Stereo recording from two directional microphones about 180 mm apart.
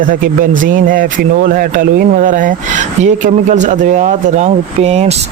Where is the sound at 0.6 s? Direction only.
50° right (ahead or behind).